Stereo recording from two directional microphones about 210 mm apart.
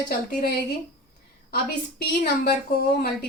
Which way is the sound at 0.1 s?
50° left (ahead or behind).